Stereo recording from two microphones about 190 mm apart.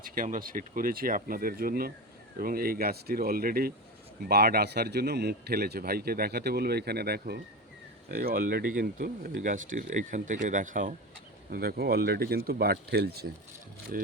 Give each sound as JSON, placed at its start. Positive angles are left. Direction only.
{"t": 0.0, "sound": "a man's voice", "side_deg": -45}
{"t": 11.5, "sound": "a man's voice", "side_deg": -55}
{"t": 13.9, "sound": "speech", "side_deg": -45}